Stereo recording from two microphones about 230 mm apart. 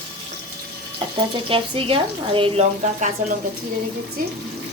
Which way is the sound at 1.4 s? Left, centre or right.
Right.